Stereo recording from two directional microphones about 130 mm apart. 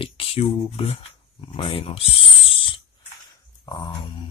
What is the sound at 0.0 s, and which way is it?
Speech, 45° left (ahead or behind).